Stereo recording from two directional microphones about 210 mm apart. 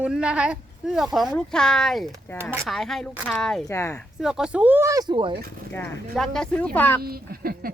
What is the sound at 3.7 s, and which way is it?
Speech, 15° left (ahead or behind).